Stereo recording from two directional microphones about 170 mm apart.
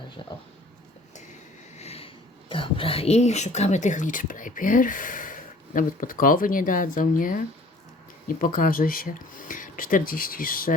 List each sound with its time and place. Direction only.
0.2 s speech: 30° left (ahead or behind)
1.8 s a sound: 35° left (ahead or behind)
2.5 s speech: 30° left (ahead or behind); by 10.8 s 55° left (ahead or behind)